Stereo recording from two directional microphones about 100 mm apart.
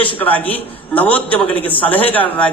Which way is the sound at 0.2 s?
15° left (ahead or behind).